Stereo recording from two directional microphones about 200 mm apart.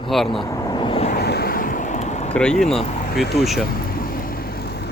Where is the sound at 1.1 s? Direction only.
50° left (ahead or behind); by 2.3 s 35° left (ahead or behind).